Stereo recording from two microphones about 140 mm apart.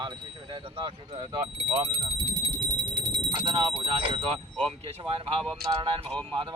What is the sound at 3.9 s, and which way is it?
Speech, 40° right (ahead or behind).